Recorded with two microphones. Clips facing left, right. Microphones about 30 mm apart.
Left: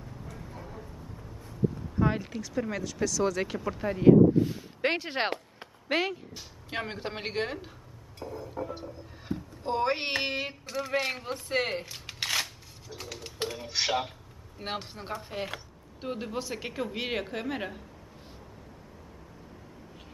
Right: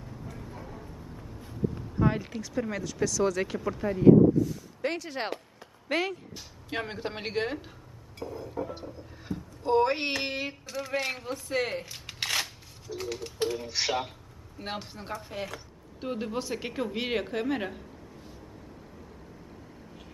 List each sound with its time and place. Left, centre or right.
0.0 s vehicle: centre
1.4 s a sound: right
1.9 s speech: centre
4.4 s speech: left
5.9 s speech: centre
9.3 s a sound: left
9.7 s speech: centre
11.3 s speech: left
11.9 s a sound: centre
13.5 s speech: centre
16.0 s speech: centre